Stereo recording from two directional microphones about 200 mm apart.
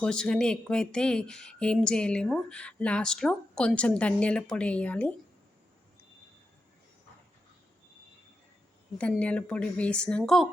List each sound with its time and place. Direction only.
0.0 s speech: 5° left (ahead or behind)
9.0 s speech: 5° left (ahead or behind)